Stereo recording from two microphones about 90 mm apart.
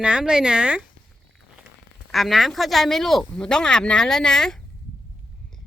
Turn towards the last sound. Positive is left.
turn(degrees=5)  # may be behind; listen again after turning